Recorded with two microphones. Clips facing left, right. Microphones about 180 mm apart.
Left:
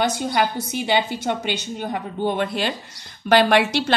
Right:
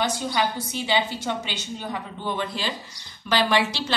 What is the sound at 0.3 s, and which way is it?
A woman's voice, 55° left (ahead or behind).